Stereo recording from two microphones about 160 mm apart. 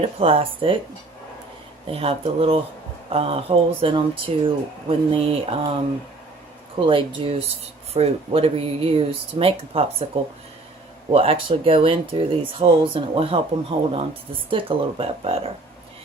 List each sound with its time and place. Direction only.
0.0 s speech: 35° right (ahead or behind)
1.9 s speech: 35° right (ahead or behind)
6.7 s speech: 30° right (ahead or behind)
11.1 s speech: 35° right (ahead or behind)